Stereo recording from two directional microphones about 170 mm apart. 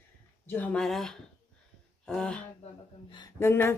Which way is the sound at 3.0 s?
25° left (ahead or behind).